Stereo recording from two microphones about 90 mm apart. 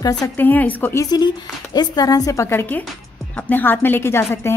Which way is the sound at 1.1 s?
45° left (ahead or behind).